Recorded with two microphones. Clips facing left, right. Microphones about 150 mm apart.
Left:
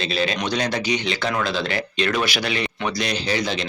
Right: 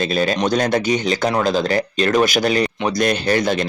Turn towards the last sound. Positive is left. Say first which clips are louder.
# right 6 dB
turn(degrees=-50)  # may be behind; listen again after turning